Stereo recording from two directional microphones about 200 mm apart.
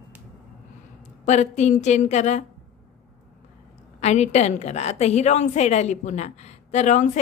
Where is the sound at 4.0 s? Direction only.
35° left (ahead or behind).